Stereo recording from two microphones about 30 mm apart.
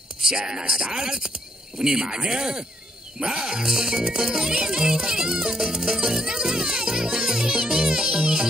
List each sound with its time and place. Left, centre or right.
0.3 s speech: right